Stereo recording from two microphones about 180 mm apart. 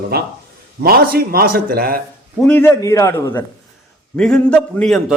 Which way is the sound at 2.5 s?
15° left (ahead or behind).